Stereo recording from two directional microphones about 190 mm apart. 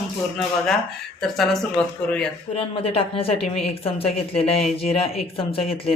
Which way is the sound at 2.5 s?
30° left (ahead or behind).